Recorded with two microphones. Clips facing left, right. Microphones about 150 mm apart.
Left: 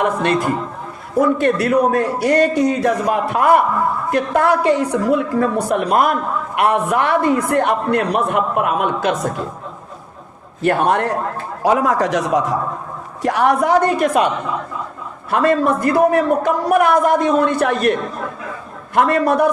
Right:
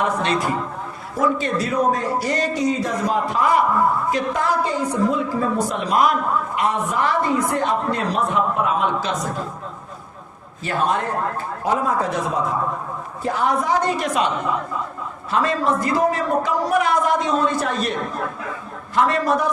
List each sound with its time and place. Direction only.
0.2 s a man's voice: 50° left (ahead or behind)
6.6 s a man's voice: 65° left (ahead or behind)
10.6 s a man's voice: 60° left (ahead or behind)
11.6 s a man's voice: 85° left; by 14.3 s 55° left (ahead or behind)
15.3 s a man's voice: 55° left (ahead or behind)
18.9 s a man's voice: 55° left (ahead or behind)